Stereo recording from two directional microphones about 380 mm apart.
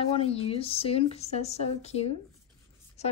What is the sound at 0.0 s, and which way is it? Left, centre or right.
Speech, centre.